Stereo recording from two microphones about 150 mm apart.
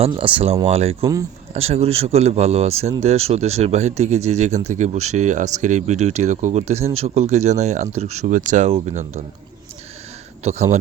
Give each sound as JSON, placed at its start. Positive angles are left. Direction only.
{"t": 0.1, "sound": "speech", "side_deg": -35}
{"t": 10.4, "sound": "speech", "side_deg": -50}